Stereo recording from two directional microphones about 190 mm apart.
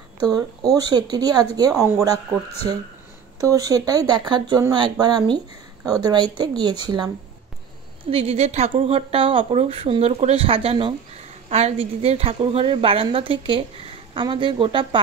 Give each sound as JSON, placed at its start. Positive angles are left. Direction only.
{"t": 0.2, "sound": "a woman's voice", "side_deg": -20}
{"t": 3.3, "sound": "a woman's voice", "side_deg": -15}